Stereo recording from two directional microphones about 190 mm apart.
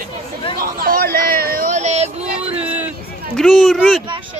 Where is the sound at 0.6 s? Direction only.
50° right (ahead or behind); by 2.6 s 35° right (ahead or behind).